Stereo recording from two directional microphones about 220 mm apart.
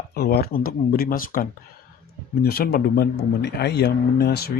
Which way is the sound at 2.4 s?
45° left (ahead or behind).